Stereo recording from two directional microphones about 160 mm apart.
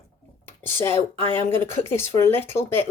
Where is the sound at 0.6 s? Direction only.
15° left (ahead or behind).